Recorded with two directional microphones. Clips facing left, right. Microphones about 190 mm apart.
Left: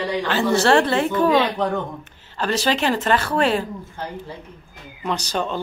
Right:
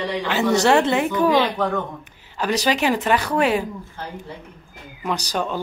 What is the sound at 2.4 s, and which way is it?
Speech, 15° right (ahead or behind).